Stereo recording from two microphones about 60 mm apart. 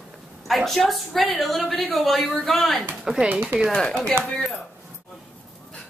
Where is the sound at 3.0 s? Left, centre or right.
Centre.